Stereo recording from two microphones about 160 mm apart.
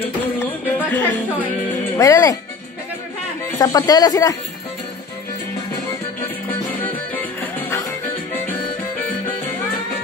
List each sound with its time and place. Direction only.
0.4 s music: 15° left (ahead or behind)
2.0 s speech: 20° left (ahead or behind)
3.5 s speech: 25° left (ahead or behind)
6.7 s music: 10° left (ahead or behind)